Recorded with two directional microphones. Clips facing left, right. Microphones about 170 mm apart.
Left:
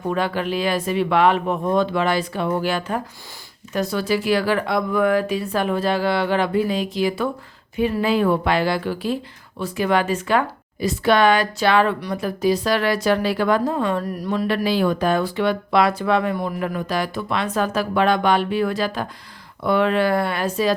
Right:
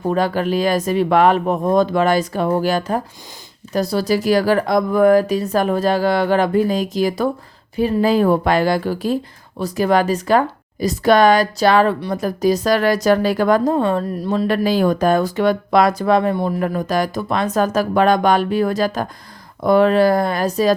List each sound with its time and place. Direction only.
0.1 s speech: 40° right (ahead or behind)
14.4 s speech: 45° right (ahead or behind)
16.3 s a man's voice: 30° right (ahead or behind)
16.6 s speech: 40° right (ahead or behind)